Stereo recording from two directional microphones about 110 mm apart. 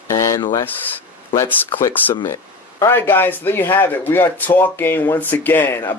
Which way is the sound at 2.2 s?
25° left (ahead or behind).